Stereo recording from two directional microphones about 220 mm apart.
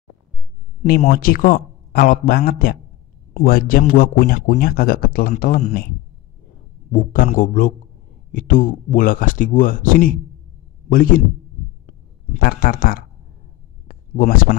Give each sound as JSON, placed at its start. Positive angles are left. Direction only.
{"t": 1.1, "sound": "speech", "side_deg": 40}
{"t": 6.9, "sound": "speech", "side_deg": 40}
{"t": 11.8, "sound": "a sound", "side_deg": 40}